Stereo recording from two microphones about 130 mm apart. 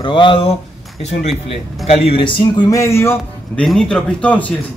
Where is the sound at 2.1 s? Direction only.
40° left (ahead or behind); by 3.1 s 20° left (ahead or behind).